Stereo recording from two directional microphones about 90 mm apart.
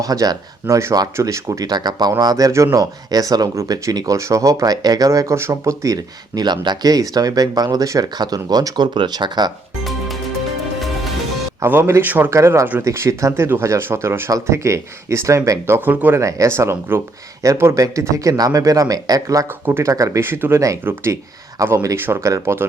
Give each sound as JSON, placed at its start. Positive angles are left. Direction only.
{"t": 0.0, "sound": "speech", "side_deg": -40}
{"t": 11.6, "sound": "speech", "side_deg": -25}
{"t": 12.3, "sound": "speech", "side_deg": -35}
{"t": 16.2, "sound": "speech", "side_deg": -35}
{"t": 19.6, "sound": "speech", "side_deg": -25}
{"t": 19.9, "sound": "speech", "side_deg": -35}